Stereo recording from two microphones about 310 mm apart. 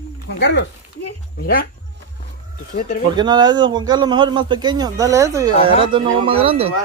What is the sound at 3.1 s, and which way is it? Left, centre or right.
Speech, centre.